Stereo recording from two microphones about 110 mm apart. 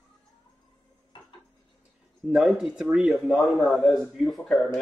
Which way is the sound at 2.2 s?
Centre (ahead or behind).